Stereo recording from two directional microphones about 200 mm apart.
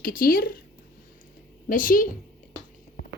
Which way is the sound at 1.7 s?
40° left (ahead or behind).